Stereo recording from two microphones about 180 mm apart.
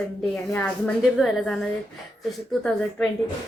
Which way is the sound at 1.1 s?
Centre (ahead or behind).